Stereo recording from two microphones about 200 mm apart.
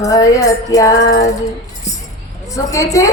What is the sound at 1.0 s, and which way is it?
Music, 65° left (ahead or behind).